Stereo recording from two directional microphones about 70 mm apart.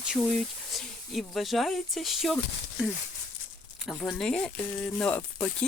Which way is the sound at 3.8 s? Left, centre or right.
Centre.